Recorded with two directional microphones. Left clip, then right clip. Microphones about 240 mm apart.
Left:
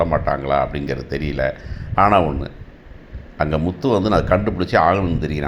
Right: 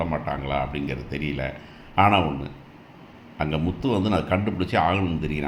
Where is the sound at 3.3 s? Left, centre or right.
Centre.